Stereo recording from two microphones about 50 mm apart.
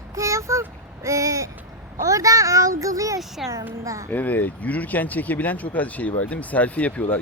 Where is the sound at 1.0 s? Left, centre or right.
Right.